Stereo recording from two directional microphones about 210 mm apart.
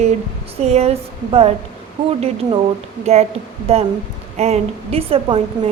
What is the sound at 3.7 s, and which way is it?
A woman's voice, 30° right (ahead or behind).